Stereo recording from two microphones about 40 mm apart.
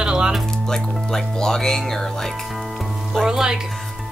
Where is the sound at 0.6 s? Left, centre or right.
Centre.